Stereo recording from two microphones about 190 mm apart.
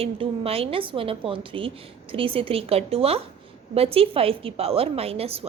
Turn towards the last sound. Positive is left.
turn(degrees=-30)  # may be behind; listen again after turning